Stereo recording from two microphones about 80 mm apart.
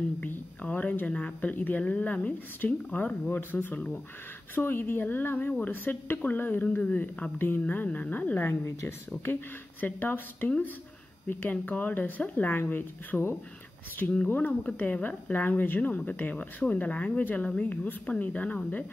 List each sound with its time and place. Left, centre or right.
0.2 s a woman's voice: centre